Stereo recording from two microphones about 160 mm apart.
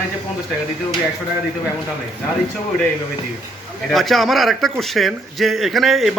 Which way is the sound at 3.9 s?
Centre (ahead or behind).